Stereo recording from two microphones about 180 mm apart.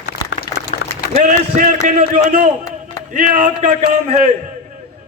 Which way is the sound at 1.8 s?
45° right (ahead or behind).